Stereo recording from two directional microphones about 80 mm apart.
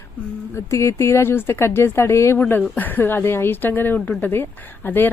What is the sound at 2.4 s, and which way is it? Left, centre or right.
Speech, left.